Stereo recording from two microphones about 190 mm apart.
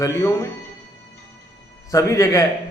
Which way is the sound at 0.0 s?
15° left (ahead or behind).